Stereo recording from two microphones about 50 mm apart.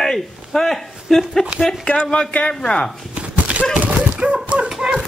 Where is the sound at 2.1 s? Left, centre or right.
Left.